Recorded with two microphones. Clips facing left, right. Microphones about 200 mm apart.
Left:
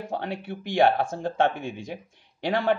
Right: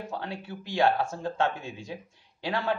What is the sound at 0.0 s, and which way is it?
Speech, 55° left (ahead or behind).